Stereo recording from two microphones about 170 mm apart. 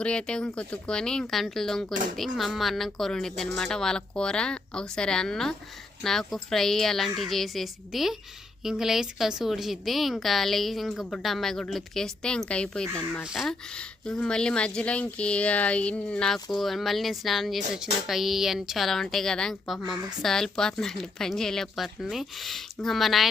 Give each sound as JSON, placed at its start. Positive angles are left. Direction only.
{"t": 0.0, "sound": "a woman's voice", "side_deg": 5}